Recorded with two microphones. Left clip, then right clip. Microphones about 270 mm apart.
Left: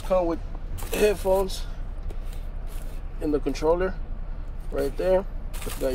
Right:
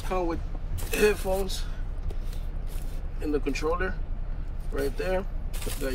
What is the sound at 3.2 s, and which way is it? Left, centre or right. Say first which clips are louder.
Speech: left 3 dB; centre.